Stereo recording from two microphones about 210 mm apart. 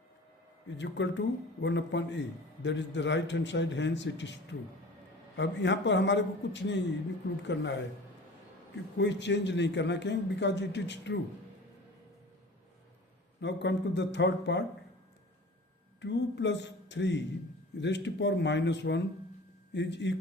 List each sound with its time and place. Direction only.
0.8 s a man's voice: 60° left (ahead or behind)
9.0 s a man's voice: 55° left (ahead or behind)
13.4 s a man's voice: 55° left (ahead or behind)
16.0 s a man's voice: 55° left (ahead or behind)